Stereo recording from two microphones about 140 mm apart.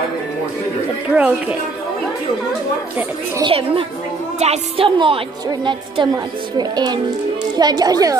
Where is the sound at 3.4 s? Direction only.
40° right (ahead or behind).